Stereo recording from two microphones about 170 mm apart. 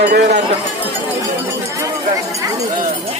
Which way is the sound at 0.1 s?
85° right.